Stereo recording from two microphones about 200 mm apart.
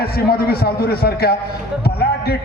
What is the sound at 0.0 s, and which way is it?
A man's voice, 50° left (ahead or behind).